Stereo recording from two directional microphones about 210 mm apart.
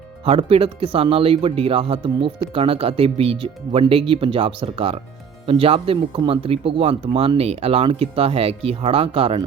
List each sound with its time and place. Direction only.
0.3 s speech: 25° right (ahead or behind)